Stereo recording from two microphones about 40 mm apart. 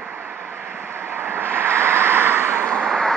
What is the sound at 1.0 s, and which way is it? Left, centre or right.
Vehicle, right.